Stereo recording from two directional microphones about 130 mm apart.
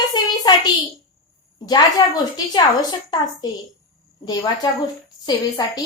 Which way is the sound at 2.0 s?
35° left (ahead or behind).